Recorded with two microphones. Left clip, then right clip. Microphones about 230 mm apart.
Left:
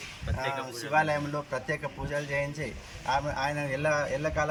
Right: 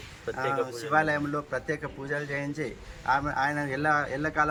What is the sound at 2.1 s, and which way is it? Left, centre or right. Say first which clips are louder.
A man's voice: left 1 dB; centre.